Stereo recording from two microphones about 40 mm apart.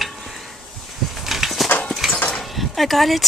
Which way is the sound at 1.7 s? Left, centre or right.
Left.